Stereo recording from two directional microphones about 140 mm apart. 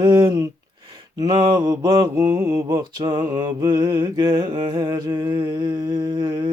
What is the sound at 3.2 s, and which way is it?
Mantra, 25° right (ahead or behind).